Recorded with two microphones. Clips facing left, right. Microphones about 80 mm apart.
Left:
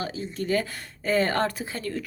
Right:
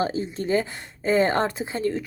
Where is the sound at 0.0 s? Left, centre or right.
Right.